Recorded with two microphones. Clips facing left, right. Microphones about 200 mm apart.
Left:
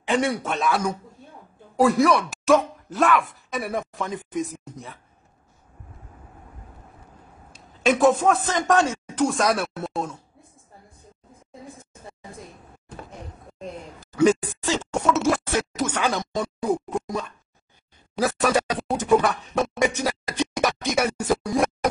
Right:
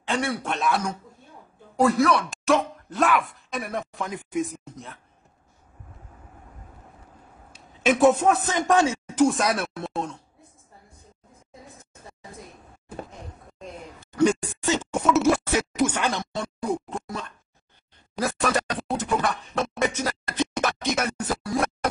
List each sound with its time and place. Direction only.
0.0 s a man's voice: 15° left (ahead or behind)
0.4 s speech: centre (ahead or behind)
7.5 s a man's voice: centre (ahead or behind)
13.9 s speech: centre (ahead or behind)
16.1 s speech: 5° left (ahead or behind)
18.1 s a sound: 5° left (ahead or behind)